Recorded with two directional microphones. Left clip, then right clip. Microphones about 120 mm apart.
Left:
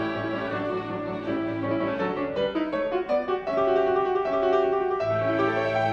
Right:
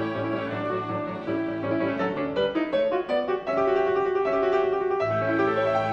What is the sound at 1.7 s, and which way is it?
Music, 30° right (ahead or behind).